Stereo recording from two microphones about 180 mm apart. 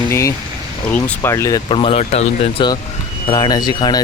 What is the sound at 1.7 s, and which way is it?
Speech, 30° left (ahead or behind).